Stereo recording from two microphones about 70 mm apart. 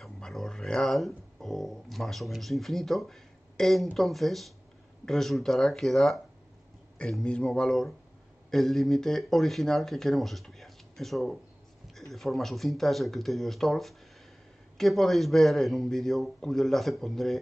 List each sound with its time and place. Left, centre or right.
0.0 s speech: centre
7.0 s a man's voice: centre